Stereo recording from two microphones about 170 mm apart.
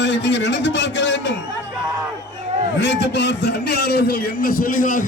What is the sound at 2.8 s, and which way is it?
A man's voice, 90° left.